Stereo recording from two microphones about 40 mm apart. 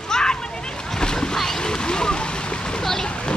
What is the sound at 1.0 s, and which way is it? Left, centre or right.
Splash, centre.